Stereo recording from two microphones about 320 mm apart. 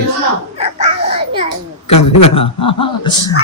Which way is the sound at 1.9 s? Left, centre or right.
Left.